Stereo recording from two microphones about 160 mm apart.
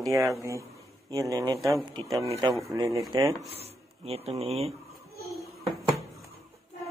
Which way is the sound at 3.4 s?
40° right (ahead or behind).